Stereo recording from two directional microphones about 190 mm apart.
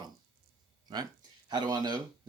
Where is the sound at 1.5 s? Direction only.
20° right (ahead or behind).